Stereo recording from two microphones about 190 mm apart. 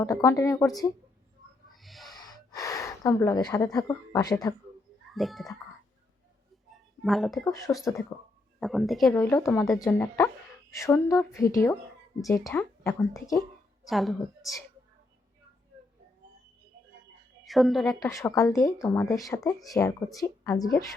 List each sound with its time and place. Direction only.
0.0 s speech: 15° left (ahead or behind)
1.7 s a sound: centre (ahead or behind)
2.1 s speech: 20° left (ahead or behind)
5.1 s a woman's voice: centre (ahead or behind)
7.0 s a woman's voice: centre (ahead or behind)
7.4 s speech: 15° left (ahead or behind)
8.6 s a woman's voice: centre (ahead or behind)
9.1 s speech: 10° left (ahead or behind)
9.6 s speech: 15° left (ahead or behind)
13.8 s a woman's voice: centre (ahead or behind)
17.4 s a woman's voice: centre (ahead or behind)
18.0 s speech: 15° left (ahead or behind)